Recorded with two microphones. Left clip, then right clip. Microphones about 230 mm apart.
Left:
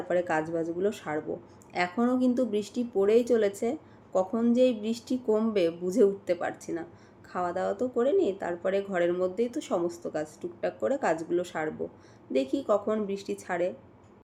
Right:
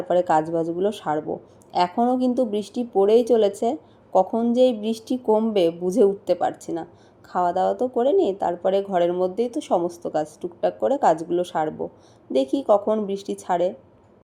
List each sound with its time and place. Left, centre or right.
0.2 s a woman's voice: centre